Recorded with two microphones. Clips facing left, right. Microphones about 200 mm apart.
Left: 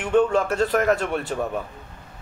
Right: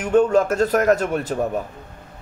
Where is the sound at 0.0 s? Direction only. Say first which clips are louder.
Right 3 dB; 40° right (ahead or behind).